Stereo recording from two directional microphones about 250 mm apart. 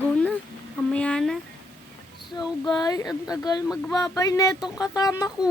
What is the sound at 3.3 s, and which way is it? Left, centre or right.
Speech, centre.